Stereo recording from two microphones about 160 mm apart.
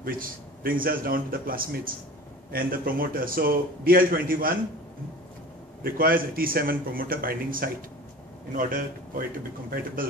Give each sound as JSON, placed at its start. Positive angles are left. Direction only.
{"t": 0.0, "sound": "a man's voice", "side_deg": -65}
{"t": 5.9, "sound": "a man's voice", "side_deg": -65}